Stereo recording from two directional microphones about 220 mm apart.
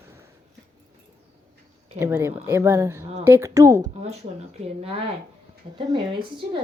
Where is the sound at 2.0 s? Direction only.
10° right (ahead or behind).